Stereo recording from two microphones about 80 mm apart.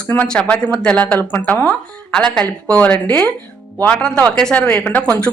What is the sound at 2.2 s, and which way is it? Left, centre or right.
Speech, centre.